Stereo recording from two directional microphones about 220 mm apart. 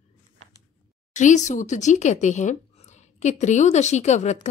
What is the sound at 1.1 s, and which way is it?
Speech, 35° left (ahead or behind).